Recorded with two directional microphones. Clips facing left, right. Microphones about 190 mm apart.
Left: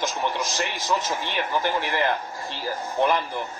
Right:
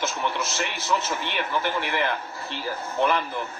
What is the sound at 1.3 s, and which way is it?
A man's voice, 45° left (ahead or behind).